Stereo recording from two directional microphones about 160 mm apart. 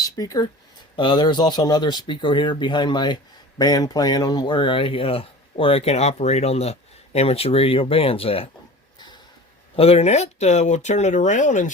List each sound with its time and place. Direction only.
0.0 s speech: 20° left (ahead or behind)
9.7 s speech: 40° left (ahead or behind)